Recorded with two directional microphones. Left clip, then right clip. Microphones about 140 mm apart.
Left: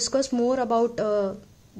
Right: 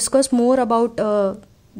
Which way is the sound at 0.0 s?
25° right (ahead or behind).